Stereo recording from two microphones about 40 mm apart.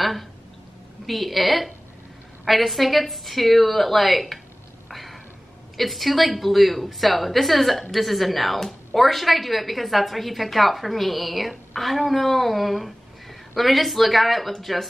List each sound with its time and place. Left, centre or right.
0.0 s a woman's voice: centre
4.8 s a sound: centre
5.8 s a woman's voice: centre